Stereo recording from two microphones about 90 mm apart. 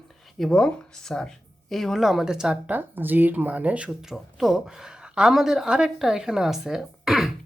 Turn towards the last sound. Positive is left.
turn(degrees=-5)  # may be behind; listen again after turning